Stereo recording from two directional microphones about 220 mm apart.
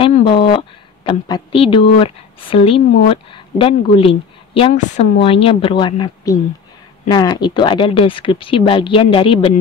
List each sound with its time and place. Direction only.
0.0 s a woman's voice: 25° left (ahead or behind)